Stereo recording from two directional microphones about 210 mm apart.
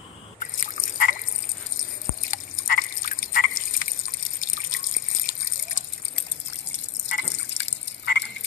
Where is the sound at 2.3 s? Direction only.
40° left (ahead or behind).